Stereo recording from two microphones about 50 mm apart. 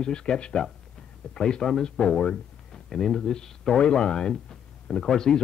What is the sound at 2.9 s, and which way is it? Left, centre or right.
Speech, centre.